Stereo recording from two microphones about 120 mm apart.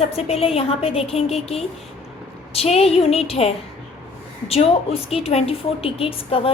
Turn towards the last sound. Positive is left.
turn(degrees=50)  # may be behind; listen again after turning